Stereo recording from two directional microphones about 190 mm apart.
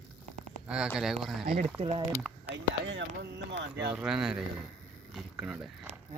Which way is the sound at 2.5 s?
70° right (ahead or behind).